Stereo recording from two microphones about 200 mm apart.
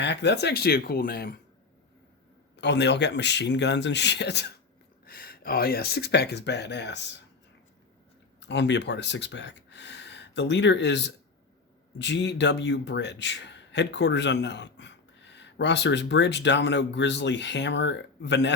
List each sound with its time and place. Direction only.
0.0 s speech: 60° left (ahead or behind)
2.6 s a man's voice: 60° left (ahead or behind)
8.4 s a man's voice: 60° left (ahead or behind)